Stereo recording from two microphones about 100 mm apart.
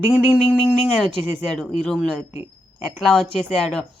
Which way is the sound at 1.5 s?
5° left (ahead or behind).